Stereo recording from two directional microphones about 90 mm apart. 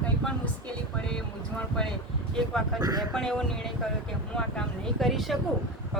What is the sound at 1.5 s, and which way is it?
Speech, 10° left (ahead or behind).